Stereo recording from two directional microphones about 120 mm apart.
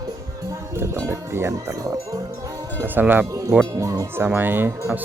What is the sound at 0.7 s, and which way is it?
Speech, 25° right (ahead or behind).